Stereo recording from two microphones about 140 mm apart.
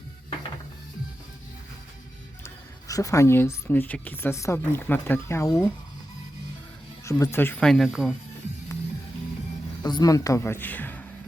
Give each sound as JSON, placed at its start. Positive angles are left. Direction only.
{"t": 2.4, "sound": "speech", "side_deg": 25}
{"t": 7.0, "sound": "speech", "side_deg": 20}
{"t": 7.6, "sound": "speech", "side_deg": 0}
{"t": 9.8, "sound": "speech", "side_deg": 30}